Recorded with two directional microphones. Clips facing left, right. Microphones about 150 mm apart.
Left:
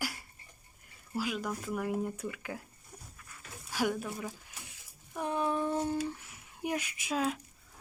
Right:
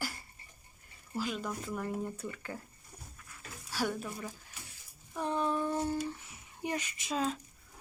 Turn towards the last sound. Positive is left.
turn(degrees=10)  # may be behind; listen again after turning